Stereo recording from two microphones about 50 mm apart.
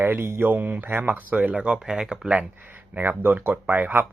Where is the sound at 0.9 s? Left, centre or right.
Right.